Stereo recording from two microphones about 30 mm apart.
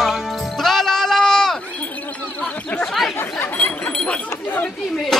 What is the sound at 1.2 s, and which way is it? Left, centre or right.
Sheep, centre.